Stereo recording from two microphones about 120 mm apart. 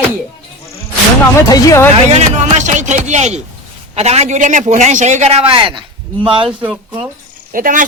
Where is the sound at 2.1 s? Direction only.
70° right (ahead or behind).